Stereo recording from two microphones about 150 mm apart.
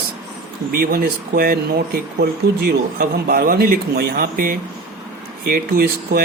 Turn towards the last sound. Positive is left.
turn(degrees=-85)